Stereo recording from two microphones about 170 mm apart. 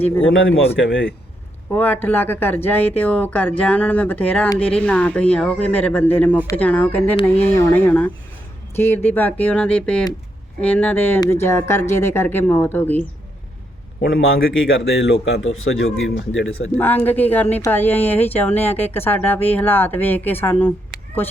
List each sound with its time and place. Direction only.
0.6 s speech: 90° left
1.7 s speech: 10° left (ahead or behind)
14.0 s a man's voice: 65° left (ahead or behind); by 16.5 s 90° left
16.7 s speech: 10° left (ahead or behind)